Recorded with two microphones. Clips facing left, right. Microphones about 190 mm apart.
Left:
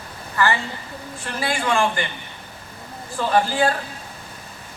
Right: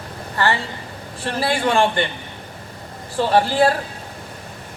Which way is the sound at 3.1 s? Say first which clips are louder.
Right 3 dB; 35° right (ahead or behind).